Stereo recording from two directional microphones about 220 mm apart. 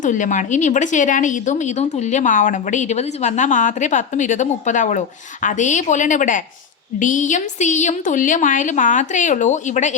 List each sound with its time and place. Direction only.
0.0 s speech: 35° left (ahead or behind)